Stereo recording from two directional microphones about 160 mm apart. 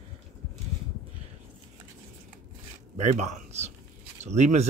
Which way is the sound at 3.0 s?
45° right (ahead or behind).